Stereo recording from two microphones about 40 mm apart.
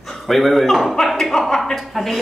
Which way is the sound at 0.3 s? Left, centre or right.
Centre.